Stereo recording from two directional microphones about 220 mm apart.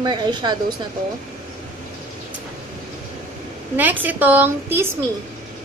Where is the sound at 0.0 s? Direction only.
20° right (ahead or behind).